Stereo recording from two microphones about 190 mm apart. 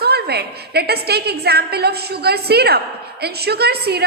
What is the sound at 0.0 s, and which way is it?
A woman's voice, 55° right (ahead or behind).